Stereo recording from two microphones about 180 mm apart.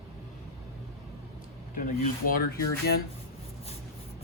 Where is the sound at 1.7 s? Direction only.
50° left (ahead or behind).